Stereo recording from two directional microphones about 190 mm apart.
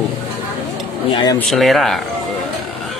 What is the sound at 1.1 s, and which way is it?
Speech, 20° left (ahead or behind).